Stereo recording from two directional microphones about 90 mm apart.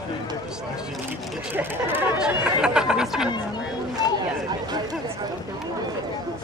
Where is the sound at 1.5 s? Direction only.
20° right (ahead or behind).